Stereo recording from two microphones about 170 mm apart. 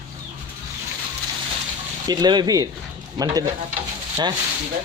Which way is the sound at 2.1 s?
25° right (ahead or behind).